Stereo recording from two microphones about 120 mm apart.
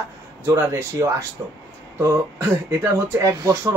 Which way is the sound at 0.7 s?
25° right (ahead or behind).